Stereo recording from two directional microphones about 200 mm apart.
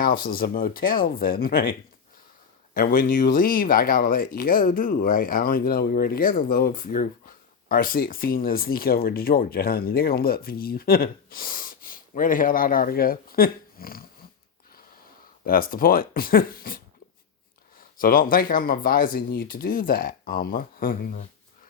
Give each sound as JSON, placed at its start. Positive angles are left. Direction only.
{"t": 0.0, "sound": "speech", "side_deg": 45}
{"t": 2.7, "sound": "speech", "side_deg": 45}
{"t": 15.4, "sound": "speech", "side_deg": 45}